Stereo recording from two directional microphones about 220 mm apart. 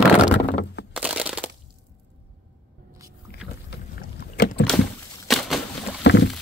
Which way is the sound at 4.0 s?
45° left (ahead or behind).